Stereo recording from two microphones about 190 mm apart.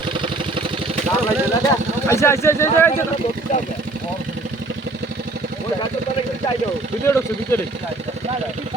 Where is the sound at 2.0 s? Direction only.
15° left (ahead or behind).